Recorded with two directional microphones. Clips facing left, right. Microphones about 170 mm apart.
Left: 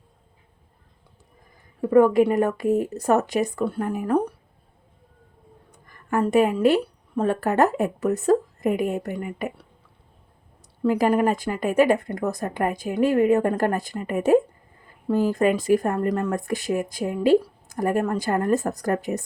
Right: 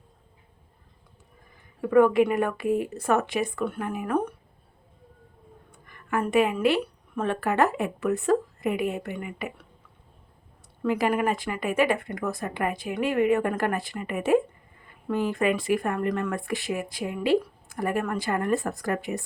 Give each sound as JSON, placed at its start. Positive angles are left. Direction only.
{"t": 1.9, "sound": "speech", "side_deg": 35}
{"t": 5.7, "sound": "a woman's voice", "side_deg": 40}
{"t": 10.8, "sound": "speech", "side_deg": 40}